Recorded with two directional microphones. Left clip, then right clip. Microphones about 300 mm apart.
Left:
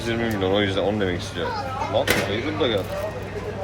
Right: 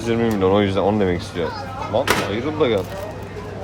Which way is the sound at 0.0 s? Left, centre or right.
Right.